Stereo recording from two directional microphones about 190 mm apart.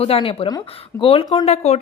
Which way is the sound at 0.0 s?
30° left (ahead or behind).